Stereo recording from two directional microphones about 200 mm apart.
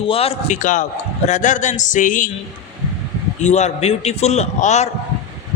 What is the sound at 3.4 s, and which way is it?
A man's voice, 35° left (ahead or behind).